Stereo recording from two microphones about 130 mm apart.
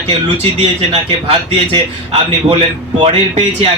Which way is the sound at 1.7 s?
40° right (ahead or behind).